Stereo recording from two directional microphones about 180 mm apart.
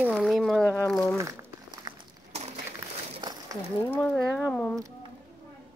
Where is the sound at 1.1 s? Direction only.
20° right (ahead or behind).